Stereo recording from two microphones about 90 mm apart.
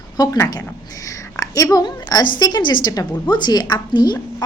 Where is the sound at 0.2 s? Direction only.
40° left (ahead or behind).